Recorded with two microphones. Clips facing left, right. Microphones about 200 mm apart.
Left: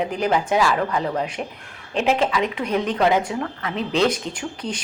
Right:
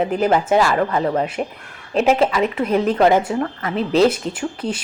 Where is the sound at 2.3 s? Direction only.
5° right (ahead or behind).